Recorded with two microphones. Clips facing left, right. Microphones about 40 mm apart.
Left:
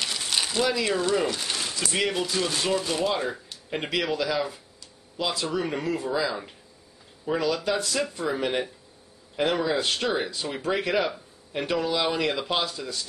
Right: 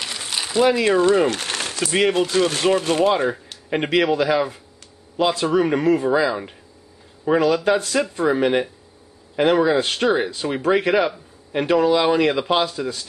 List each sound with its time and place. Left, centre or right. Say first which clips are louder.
0.0 s a sound: right 1 dB; centre
0.5 s speech: right 10 dB; right
0.7 s speech: right 8 dB; right
1.3 s a sound: right 4 dB; right
1.9 s speech: right 8 dB; right
2.1 s speech: right 8 dB; right
3.1 s speech: right 8 dB; right
6.1 s speech: right 8 dB; right
8.3 s speech: right 8 dB; right